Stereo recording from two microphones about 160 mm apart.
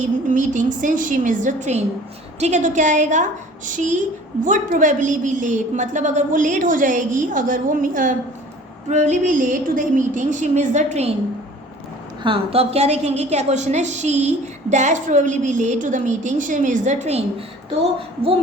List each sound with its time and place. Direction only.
0.0 s a woman's voice: 50° right (ahead or behind)
12.2 s a woman's voice: 35° right (ahead or behind)